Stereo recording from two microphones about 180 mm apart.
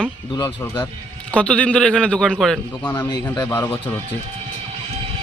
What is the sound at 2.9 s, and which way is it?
Speech, 15° left (ahead or behind).